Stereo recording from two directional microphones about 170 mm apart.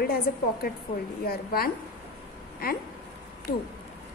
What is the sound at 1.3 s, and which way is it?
Speech, 60° left (ahead or behind).